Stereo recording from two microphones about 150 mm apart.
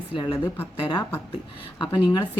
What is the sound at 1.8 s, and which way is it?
Speech, 30° left (ahead or behind).